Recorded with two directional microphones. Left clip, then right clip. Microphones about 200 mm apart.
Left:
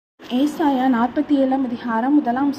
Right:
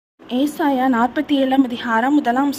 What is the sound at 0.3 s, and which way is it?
A woman's voice, 30° right (ahead or behind).